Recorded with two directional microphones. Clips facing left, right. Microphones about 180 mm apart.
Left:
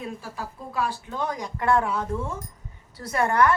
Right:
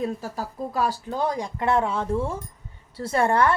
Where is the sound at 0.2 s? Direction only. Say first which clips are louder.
Right 5 dB; 40° right (ahead or behind).